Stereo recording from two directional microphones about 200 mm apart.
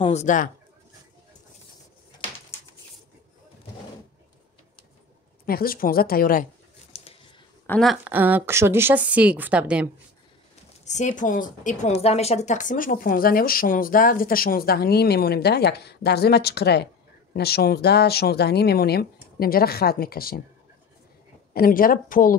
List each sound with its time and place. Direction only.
0.0 s speech: 35° left (ahead or behind)
5.5 s a woman's voice: 45° left (ahead or behind)
6.9 s scissors: 30° left (ahead or behind)
7.6 s a woman's voice: 5° left (ahead or behind)
10.9 s a woman's voice: 40° left (ahead or behind)
21.5 s a woman's voice: 45° left (ahead or behind)